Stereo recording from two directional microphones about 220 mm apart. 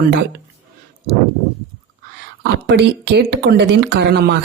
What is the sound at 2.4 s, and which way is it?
Speech, 50° right (ahead or behind).